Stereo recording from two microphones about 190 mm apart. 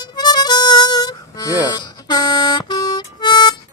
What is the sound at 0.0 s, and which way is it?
Harmonica, 20° left (ahead or behind).